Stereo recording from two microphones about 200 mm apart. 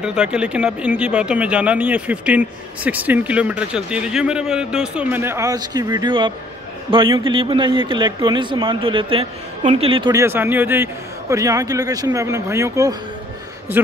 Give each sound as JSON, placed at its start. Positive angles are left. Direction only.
{"t": 0.0, "sound": "speech", "side_deg": -5}
{"t": 10.2, "sound": "speech", "side_deg": -10}